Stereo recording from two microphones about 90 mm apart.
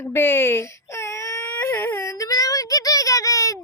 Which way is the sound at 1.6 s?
25° left (ahead or behind).